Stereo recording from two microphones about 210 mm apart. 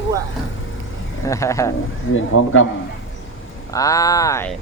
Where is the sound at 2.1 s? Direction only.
70° left (ahead or behind).